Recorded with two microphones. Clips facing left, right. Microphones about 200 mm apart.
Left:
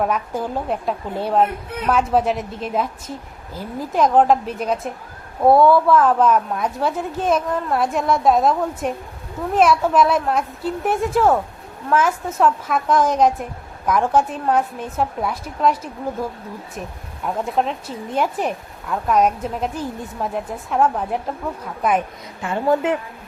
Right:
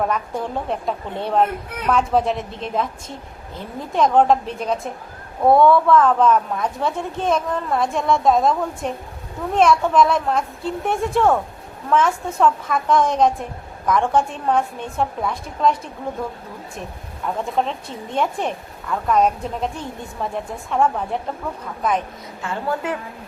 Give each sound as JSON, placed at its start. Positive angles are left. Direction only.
{"t": 0.0, "sound": "a woman's voice", "side_deg": 5}
{"t": 17.2, "sound": "a woman's voice", "side_deg": 5}
{"t": 22.4, "sound": "a woman's voice", "side_deg": 25}